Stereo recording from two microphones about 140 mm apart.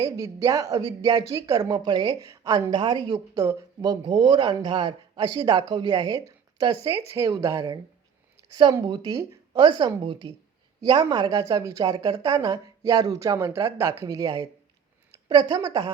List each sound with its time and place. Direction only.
0.0 s a woman's voice: 20° right (ahead or behind)